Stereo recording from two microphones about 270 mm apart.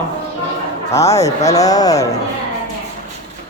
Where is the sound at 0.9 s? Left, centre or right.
Centre.